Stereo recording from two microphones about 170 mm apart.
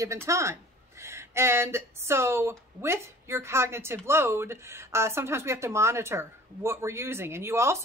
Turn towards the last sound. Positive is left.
turn(degrees=-15)  # may be behind; listen again after turning